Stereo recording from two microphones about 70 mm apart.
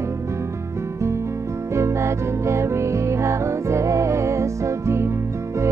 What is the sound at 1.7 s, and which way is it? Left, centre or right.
Music, right.